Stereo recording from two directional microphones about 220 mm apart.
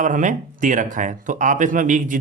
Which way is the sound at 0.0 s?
35° right (ahead or behind).